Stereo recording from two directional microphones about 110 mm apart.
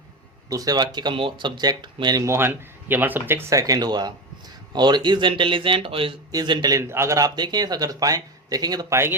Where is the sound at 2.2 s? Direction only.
25° right (ahead or behind); by 6.2 s 55° right (ahead or behind).